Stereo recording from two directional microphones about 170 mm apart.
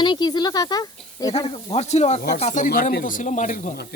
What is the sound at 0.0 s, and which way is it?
Speech, 25° left (ahead or behind).